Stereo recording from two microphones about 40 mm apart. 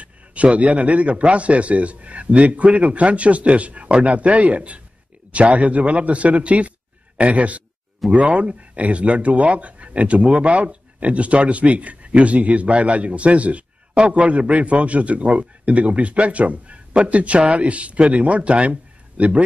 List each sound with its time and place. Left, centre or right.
0.0 s speech: right